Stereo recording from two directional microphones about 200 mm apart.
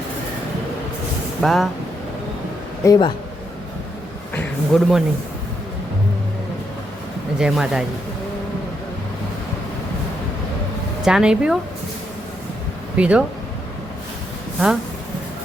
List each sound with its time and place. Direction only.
1.4 s speech: centre (ahead or behind)
2.8 s speech: 20° left (ahead or behind)
4.4 s speech: centre (ahead or behind)
7.3 s speech: 5° right (ahead or behind)
11.0 s speech: 5° right (ahead or behind)
13.0 s speech: 5° right (ahead or behind)